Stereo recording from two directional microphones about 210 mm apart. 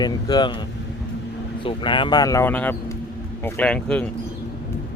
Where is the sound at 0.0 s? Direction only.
20° left (ahead or behind).